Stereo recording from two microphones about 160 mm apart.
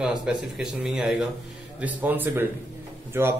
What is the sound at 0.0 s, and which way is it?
A man's voice, 5° right (ahead or behind).